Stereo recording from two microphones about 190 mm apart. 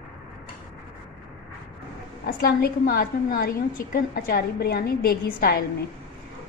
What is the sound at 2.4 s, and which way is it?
A woman's voice, 55° left (ahead or behind).